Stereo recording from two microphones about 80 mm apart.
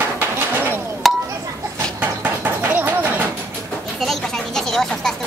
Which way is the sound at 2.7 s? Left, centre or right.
Right.